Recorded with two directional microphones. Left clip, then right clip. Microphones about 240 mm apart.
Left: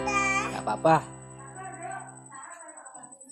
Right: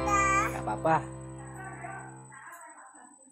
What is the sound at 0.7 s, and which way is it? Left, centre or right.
Speech, centre.